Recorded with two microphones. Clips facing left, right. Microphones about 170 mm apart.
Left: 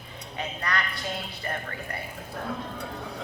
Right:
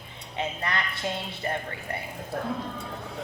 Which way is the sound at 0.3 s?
25° right (ahead or behind).